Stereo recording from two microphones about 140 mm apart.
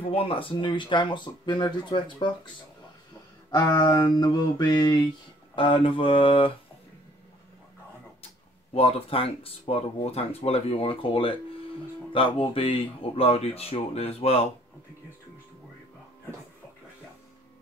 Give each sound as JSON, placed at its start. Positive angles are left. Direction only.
{"t": 0.1, "sound": "speech", "side_deg": 40}
{"t": 3.5, "sound": "mantra", "side_deg": 30}
{"t": 5.6, "sound": "speech", "side_deg": 40}
{"t": 8.7, "sound": "speech", "side_deg": 45}